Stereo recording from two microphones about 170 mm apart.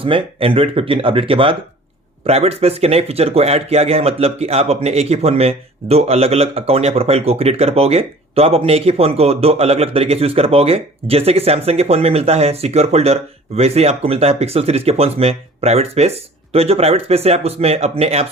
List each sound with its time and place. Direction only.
0.0 s speech: 30° right (ahead or behind)